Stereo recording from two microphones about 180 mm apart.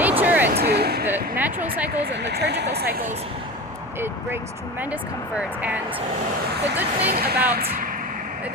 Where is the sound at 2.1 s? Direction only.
70° right (ahead or behind).